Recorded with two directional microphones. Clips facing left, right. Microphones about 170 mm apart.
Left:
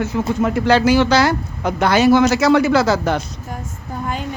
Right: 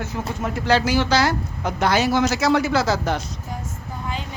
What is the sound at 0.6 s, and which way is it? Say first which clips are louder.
Speech: left 4 dB; 65° left (ahead or behind).